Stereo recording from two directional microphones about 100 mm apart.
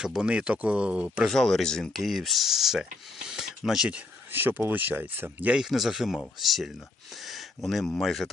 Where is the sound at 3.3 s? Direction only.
5° right (ahead or behind).